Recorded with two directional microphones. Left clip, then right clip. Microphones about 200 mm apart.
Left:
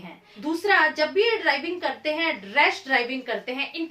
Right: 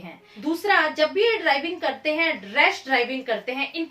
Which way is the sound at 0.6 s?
15° left (ahead or behind).